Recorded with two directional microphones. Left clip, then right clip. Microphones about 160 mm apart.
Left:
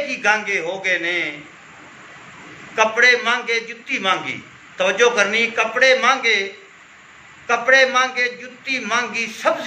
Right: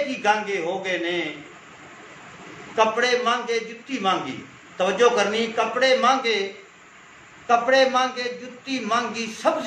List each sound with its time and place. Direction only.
0.1 s a man's voice: 20° right (ahead or behind)
2.7 s a man's voice: 25° right (ahead or behind)
7.7 s a man's voice: 25° right (ahead or behind)